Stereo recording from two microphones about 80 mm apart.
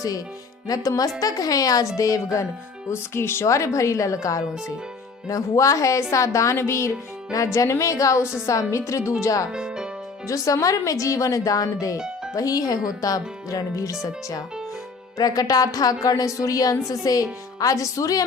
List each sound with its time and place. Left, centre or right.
0.7 s a woman's voice: left
2.9 s a woman's voice: left
8.2 s a woman's voice: centre
8.4 s a woman's voice: left
9.5 s music: centre
10.2 s a woman's voice: left
11.9 s music: centre
12.3 s a woman's voice: left